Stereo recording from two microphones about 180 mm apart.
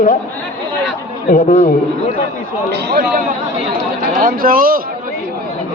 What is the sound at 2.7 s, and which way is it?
Speech, 65° right (ahead or behind).